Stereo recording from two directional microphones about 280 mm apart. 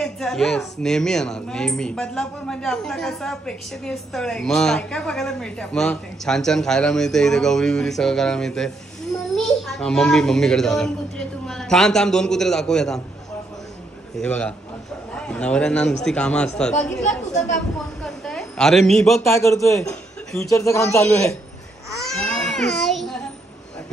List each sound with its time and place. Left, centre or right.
0.0 s a woman's voice: centre
14.1 s a woman's voice: centre
17.3 s speech: left
18.0 s a sound: centre
20.3 s a man's voice: centre
21.9 s a sound: centre